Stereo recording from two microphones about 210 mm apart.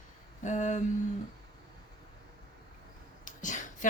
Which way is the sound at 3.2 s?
35° left (ahead or behind).